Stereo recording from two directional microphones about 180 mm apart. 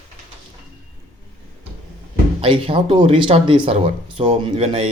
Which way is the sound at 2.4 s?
30° right (ahead or behind).